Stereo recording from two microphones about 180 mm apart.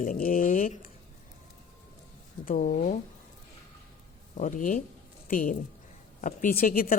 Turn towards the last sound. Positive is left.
turn(degrees=55)  # may be behind; listen again after turning